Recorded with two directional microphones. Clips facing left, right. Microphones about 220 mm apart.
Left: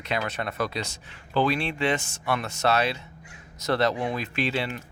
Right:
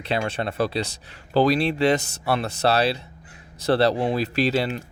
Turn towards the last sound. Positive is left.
turn(degrees=-35)  # may be behind; listen again after turning